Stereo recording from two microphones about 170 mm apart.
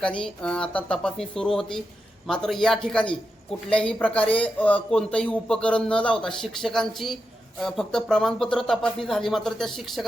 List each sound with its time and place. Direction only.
0.0 s speech: 5° left (ahead or behind)